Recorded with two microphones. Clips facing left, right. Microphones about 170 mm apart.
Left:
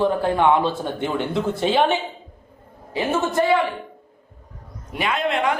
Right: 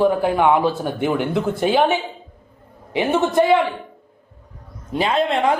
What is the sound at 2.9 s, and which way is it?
Speech, 20° right (ahead or behind).